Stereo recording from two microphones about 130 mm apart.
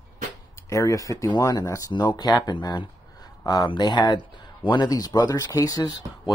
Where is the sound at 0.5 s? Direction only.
25° left (ahead or behind).